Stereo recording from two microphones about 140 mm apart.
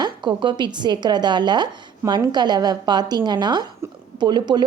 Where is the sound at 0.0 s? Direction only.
30° right (ahead or behind).